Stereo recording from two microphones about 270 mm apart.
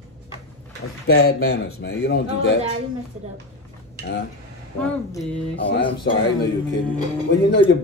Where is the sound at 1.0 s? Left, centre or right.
Left.